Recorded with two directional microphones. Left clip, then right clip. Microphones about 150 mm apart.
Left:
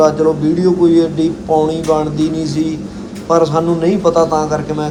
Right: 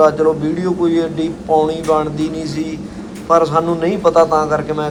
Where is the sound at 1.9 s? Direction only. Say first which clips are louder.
Left 2 dB; 20° left (ahead or behind).